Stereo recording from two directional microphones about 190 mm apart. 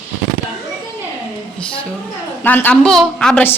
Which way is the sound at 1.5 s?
5° left (ahead or behind).